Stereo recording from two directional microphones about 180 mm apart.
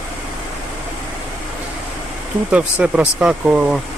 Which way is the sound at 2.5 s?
10° right (ahead or behind).